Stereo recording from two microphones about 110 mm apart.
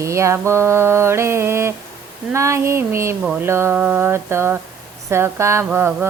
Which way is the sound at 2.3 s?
25° right (ahead or behind).